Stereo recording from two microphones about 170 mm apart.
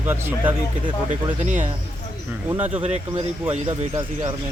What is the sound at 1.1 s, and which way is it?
Speech, 45° right (ahead or behind).